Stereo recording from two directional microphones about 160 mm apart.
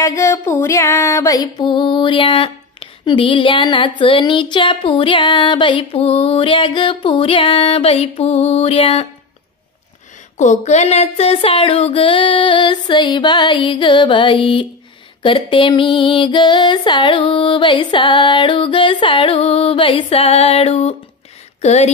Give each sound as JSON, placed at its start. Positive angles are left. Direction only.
{"t": 0.0, "sound": "female singing", "side_deg": 20}
{"t": 10.3, "sound": "female singing", "side_deg": 45}
{"t": 21.5, "sound": "speech", "side_deg": 40}